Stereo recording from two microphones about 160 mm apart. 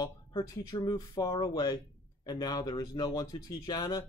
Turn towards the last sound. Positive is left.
turn(degrees=25)  # may be behind; listen again after turning